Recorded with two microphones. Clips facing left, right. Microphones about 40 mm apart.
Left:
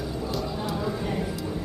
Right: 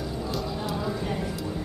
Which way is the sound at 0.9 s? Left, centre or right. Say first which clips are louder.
Left 1 dB; centre.